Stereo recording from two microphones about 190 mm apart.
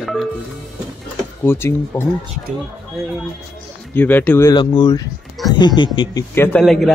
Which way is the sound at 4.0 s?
10° left (ahead or behind).